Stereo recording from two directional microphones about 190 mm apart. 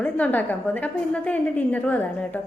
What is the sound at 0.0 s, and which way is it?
A woman's voice, 10° left (ahead or behind).